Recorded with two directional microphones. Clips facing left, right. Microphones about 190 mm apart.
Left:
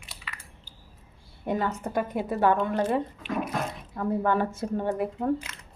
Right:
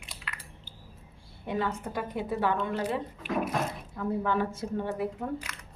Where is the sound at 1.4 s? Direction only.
50° left (ahead or behind).